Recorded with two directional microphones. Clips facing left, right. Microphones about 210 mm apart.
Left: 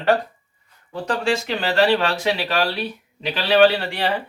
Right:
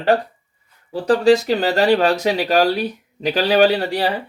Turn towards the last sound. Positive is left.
turn(degrees=-40)  # may be behind; listen again after turning